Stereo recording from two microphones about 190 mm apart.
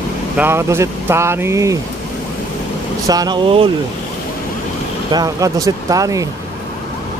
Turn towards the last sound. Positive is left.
turn(degrees=-20)  # may be behind; listen again after turning